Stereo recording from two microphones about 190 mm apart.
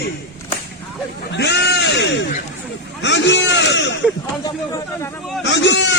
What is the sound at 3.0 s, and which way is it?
Speech, 70° left (ahead or behind).